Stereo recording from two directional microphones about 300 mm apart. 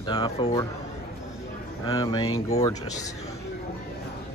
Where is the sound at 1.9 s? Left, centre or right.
Centre.